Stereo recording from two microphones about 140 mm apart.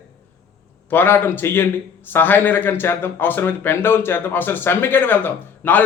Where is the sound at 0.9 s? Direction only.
15° left (ahead or behind).